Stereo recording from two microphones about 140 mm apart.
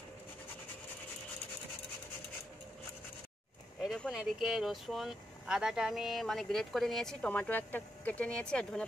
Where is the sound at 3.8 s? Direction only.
Centre (ahead or behind).